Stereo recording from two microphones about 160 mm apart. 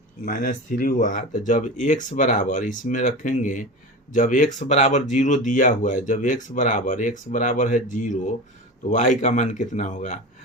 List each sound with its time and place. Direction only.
0.3 s speech: 60° left (ahead or behind)